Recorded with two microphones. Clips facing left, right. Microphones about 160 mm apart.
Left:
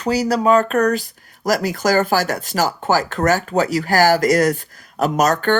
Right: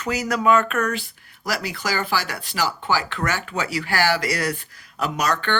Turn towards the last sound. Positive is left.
turn(degrees=45)  # may be behind; listen again after turning